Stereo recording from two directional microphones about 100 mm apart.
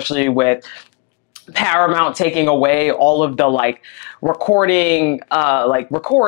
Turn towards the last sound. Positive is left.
turn(degrees=25)  # may be behind; listen again after turning